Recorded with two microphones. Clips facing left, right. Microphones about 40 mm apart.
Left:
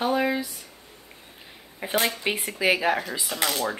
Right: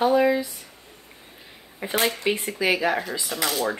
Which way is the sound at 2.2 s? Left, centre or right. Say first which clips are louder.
Right 1 dB; centre.